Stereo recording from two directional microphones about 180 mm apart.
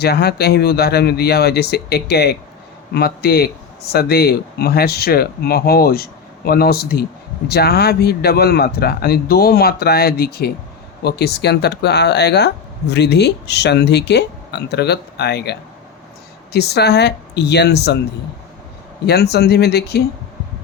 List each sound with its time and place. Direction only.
0.0 s speech: 65° left (ahead or behind)
19.0 s speech: 65° left (ahead or behind)